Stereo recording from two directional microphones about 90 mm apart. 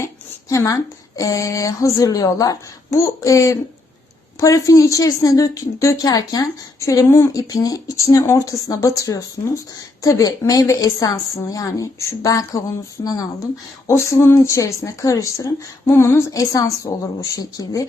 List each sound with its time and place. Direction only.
0.0 s a woman's voice: 35° left (ahead or behind)
13.0 s speech: 50° left (ahead or behind)
13.8 s a woman's voice: 30° left (ahead or behind)